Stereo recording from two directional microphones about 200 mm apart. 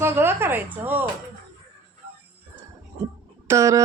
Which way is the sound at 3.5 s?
15° right (ahead or behind).